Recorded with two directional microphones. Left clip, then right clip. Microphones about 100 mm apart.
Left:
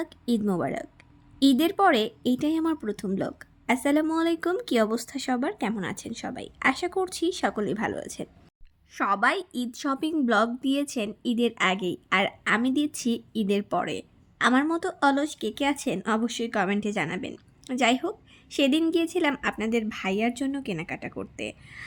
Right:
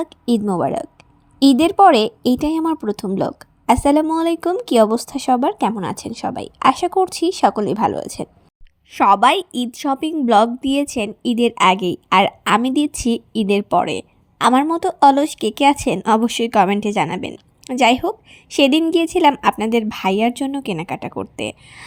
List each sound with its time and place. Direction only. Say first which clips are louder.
0.0 s a woman's voice: right 8 dB; 45° right (ahead or behind)
4.1 s a woman's voice: right 7 dB; 35° right (ahead or behind)
8.9 s a woman's voice: right 11 dB; 55° right (ahead or behind)
9.7 s a woman's voice: right 7 dB; 35° right (ahead or behind); by 19.3 s 55° right (ahead or behind)
19.4 s speech: right 11 dB; 65° right (ahead or behind)